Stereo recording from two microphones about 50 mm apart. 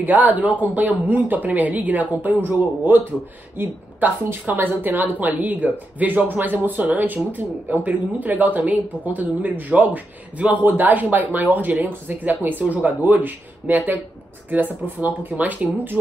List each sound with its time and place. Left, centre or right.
0.0 s a woman's voice: right